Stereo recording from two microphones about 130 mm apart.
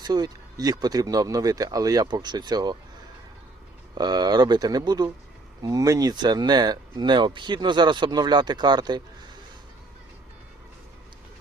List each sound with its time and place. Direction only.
0.0 s speech: 30° right (ahead or behind)
3.9 s speech: 30° right (ahead or behind)